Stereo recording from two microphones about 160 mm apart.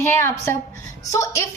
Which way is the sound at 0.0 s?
15° left (ahead or behind).